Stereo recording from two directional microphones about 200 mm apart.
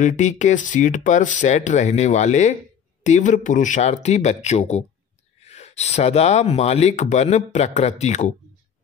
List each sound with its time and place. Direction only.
0.0 s speech: 35° left (ahead or behind)